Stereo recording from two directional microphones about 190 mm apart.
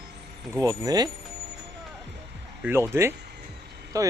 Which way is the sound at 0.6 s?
20° right (ahead or behind).